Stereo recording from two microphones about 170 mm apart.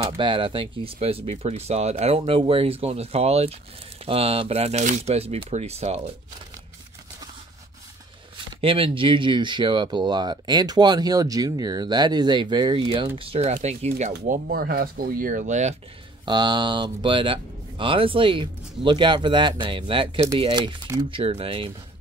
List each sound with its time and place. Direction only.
0.0 s speech: 30° right (ahead or behind)
8.5 s speech: 35° right (ahead or behind)
14.2 s speech: 55° right (ahead or behind)
16.3 s speech: 25° right (ahead or behind)